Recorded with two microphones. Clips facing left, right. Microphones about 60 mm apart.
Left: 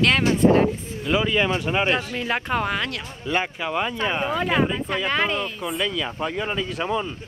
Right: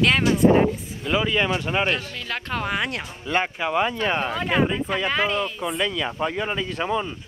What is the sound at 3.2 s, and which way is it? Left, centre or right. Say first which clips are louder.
Speech: right 1 dB; centre.